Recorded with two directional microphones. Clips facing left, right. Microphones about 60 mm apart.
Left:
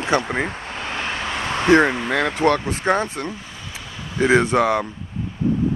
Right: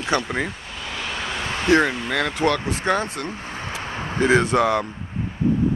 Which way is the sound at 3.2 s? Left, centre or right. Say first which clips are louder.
Right 1 dB; right.